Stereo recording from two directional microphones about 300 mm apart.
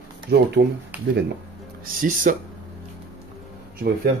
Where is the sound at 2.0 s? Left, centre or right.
Right.